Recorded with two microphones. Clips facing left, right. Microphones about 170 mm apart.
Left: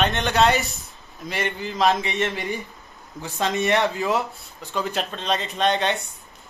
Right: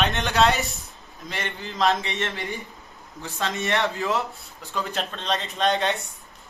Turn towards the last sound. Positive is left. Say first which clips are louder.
# left 1 dB
turn(degrees=0)  # may be behind; listen again after turning